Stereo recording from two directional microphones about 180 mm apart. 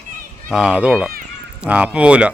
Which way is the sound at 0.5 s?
5° right (ahead or behind).